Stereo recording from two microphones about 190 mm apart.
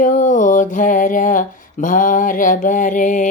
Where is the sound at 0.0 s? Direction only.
40° left (ahead or behind).